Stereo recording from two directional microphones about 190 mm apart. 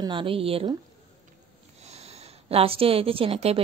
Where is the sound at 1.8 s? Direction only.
35° right (ahead or behind).